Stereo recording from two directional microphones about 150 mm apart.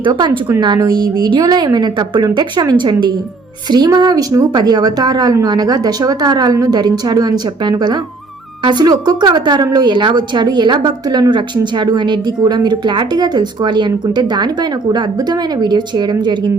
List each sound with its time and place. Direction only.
0.0 s a woman's voice: 30° right (ahead or behind)